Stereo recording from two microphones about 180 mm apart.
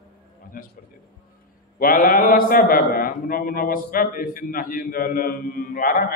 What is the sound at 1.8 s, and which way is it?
A man's voice, 50° left (ahead or behind).